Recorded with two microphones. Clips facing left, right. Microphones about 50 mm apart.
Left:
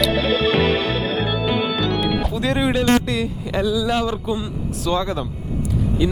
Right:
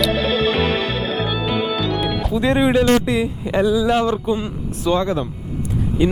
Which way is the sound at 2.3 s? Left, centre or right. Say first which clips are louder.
Right 7 dB; centre.